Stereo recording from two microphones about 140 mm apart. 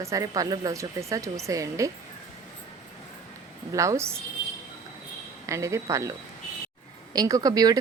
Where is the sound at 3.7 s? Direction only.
20° right (ahead or behind).